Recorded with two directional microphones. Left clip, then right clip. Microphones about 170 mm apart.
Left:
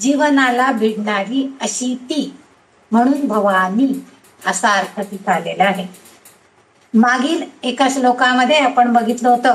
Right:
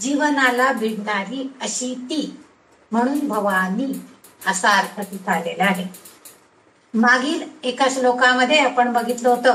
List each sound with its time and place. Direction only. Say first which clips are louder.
0.0 s a woman's voice: left 4 dB; 35° left (ahead or behind)
7.0 s a woman's voice: left 2 dB; 35° left (ahead or behind)